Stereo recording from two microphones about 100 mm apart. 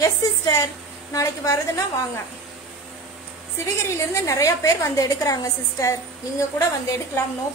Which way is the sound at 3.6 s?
30° left (ahead or behind).